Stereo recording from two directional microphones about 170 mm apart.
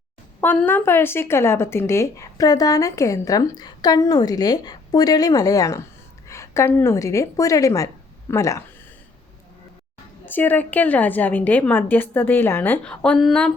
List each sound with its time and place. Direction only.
0.4 s a woman's voice: 10° left (ahead or behind)
10.2 s a woman's voice: 10° left (ahead or behind)